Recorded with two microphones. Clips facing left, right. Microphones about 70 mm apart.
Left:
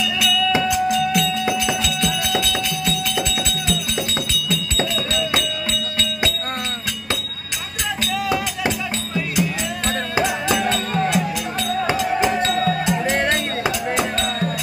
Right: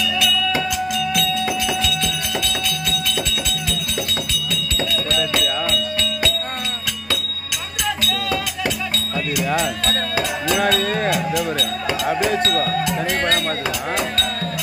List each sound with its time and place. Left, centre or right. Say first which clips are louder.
1.4 s music: left 1 dB; centre
4.1 s music: left 2 dB; centre
9.8 s music: left 1 dB; centre
10.6 s music: right 2 dB; right
12.2 s music: even; left